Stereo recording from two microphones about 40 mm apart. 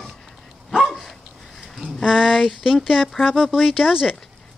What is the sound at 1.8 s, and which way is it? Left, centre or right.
Speech, centre.